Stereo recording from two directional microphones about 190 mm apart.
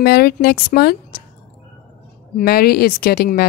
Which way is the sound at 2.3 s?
50° left (ahead or behind).